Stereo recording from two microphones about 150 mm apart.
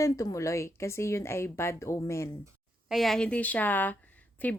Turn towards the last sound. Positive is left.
turn(degrees=10)  # may be behind; listen again after turning